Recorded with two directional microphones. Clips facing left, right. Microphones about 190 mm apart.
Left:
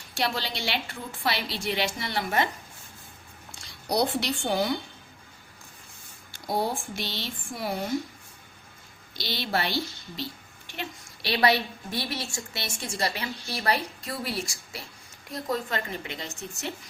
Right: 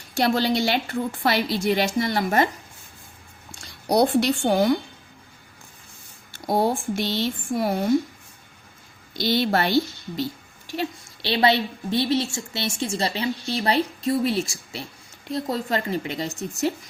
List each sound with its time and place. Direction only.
0.2 s a woman's voice: 45° right (ahead or behind)
3.8 s a woman's voice: 50° right (ahead or behind)
6.5 s a woman's voice: 50° right (ahead or behind)
9.1 s a woman's voice: 50° right (ahead or behind)
10.7 s a woman's voice: 30° right (ahead or behind)